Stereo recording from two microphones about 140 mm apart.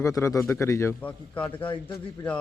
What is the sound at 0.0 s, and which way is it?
A man's voice, 20° left (ahead or behind).